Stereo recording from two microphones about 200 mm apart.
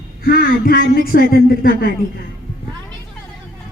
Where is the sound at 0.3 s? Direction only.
50° left (ahead or behind).